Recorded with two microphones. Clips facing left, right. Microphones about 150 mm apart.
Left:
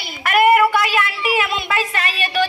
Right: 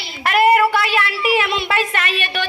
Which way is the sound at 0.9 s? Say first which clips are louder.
Right 1 dB; 40° left (ahead or behind).